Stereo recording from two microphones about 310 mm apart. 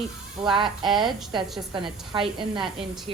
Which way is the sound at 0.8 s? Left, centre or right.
Centre.